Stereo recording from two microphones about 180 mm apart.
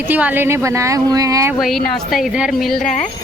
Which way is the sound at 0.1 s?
10° right (ahead or behind).